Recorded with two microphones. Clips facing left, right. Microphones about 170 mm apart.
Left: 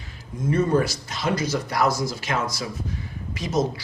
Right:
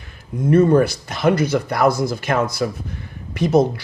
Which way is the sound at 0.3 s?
60° right (ahead or behind).